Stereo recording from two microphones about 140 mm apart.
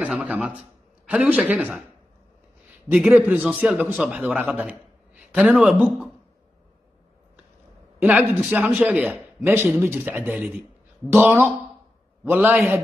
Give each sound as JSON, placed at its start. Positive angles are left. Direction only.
{"t": 0.0, "sound": "a man's voice", "side_deg": -10}
{"t": 2.9, "sound": "a man's voice", "side_deg": -10}
{"t": 8.0, "sound": "a man's voice", "side_deg": -10}